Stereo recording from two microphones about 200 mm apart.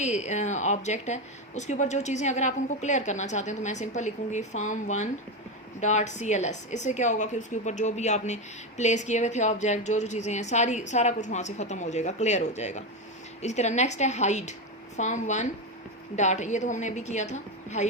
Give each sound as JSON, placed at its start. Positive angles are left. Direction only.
{"t": 0.0, "sound": "a woman's voice", "side_deg": 35}